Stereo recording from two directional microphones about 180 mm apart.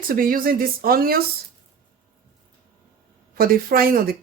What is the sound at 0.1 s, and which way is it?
Speech, 50° right (ahead or behind).